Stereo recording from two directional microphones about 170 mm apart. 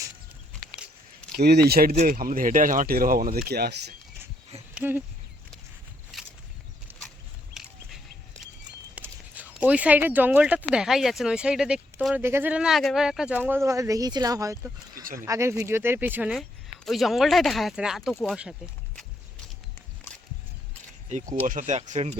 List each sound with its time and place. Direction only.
1.4 s speech: 70° right (ahead or behind)
4.7 s speech: 10° right (ahead or behind)
6.1 s a sound: centre (ahead or behind)
7.6 s bird: centre (ahead or behind)
9.0 s speech: 10° right (ahead or behind)
16.3 s speech: centre (ahead or behind)
21.1 s speech: 40° right (ahead or behind)